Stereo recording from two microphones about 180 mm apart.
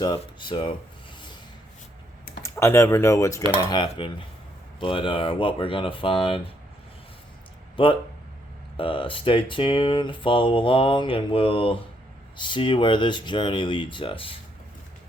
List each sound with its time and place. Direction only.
0.0 s speech: 25° left (ahead or behind)
2.4 s speech: 15° left (ahead or behind)
7.8 s speech: 30° left (ahead or behind)